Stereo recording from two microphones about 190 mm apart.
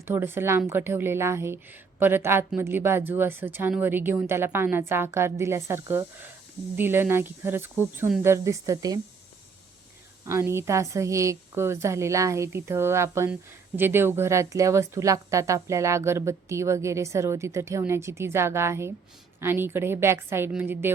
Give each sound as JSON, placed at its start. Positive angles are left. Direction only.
{"t": 0.0, "sound": "speech", "side_deg": -10}
{"t": 10.2, "sound": "speech", "side_deg": -15}